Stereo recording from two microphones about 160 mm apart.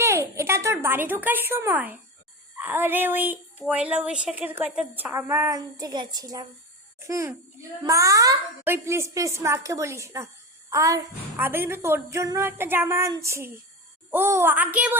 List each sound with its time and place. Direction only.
0.0 s a woman's voice: 15° right (ahead or behind)